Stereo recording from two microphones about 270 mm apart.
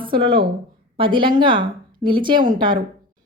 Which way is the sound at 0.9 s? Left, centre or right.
Centre.